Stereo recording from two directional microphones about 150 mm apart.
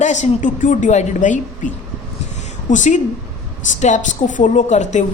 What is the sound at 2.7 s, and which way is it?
A woman's voice, 55° left (ahead or behind).